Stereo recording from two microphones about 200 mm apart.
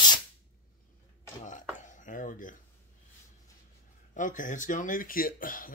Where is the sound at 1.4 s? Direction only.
40° left (ahead or behind).